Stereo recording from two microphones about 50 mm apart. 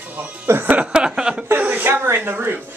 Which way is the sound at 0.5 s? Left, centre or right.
Right.